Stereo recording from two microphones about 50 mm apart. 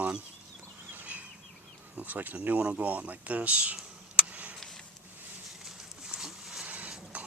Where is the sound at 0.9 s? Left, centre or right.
Right.